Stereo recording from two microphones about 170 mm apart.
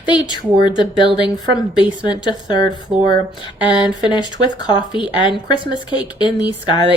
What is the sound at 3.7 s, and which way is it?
Speech, 25° left (ahead or behind).